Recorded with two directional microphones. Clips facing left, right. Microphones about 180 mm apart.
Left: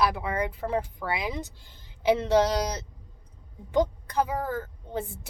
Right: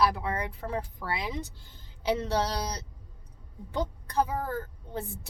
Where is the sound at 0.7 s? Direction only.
15° left (ahead or behind).